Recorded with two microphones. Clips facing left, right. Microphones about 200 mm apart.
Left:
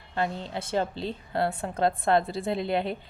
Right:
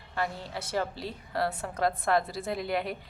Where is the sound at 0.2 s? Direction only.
25° left (ahead or behind).